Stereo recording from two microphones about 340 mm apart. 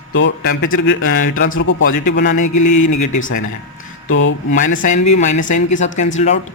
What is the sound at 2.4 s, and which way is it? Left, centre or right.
Speech, left.